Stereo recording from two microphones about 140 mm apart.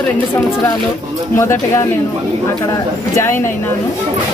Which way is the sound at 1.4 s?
20° left (ahead or behind).